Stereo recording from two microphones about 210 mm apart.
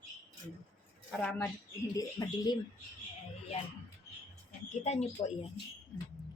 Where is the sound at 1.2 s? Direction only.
5° left (ahead or behind).